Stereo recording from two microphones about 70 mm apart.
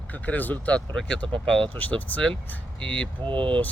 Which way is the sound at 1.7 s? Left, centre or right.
Left.